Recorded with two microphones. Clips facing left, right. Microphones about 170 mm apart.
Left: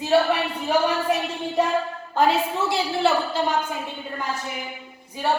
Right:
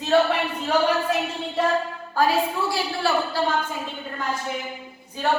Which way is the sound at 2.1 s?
20° left (ahead or behind).